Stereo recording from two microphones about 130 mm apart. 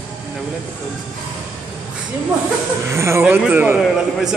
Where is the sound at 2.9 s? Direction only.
20° right (ahead or behind).